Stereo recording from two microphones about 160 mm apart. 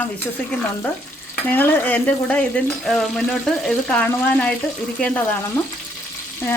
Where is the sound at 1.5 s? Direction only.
10° left (ahead or behind).